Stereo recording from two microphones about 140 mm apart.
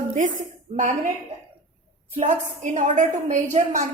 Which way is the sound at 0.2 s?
65° right (ahead or behind).